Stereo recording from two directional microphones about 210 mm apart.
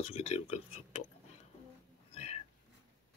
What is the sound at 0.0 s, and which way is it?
Speech, 30° left (ahead or behind).